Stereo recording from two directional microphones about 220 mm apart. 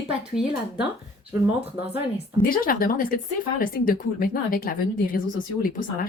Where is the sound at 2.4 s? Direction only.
40° left (ahead or behind).